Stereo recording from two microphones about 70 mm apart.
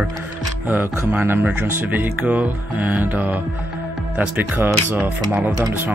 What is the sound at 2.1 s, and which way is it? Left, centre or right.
Mantra, centre.